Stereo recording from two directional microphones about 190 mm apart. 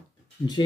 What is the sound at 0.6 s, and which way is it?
Speech, 25° left (ahead or behind).